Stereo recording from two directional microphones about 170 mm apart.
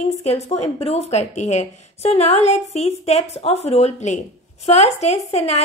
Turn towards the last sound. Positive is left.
turn(degrees=40)  # may be behind; listen again after turning